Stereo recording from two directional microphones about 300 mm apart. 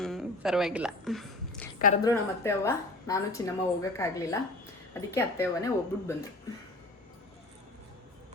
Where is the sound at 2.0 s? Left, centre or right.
Centre.